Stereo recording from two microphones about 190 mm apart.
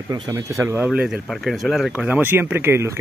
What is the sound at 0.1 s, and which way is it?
Speech, 15° right (ahead or behind).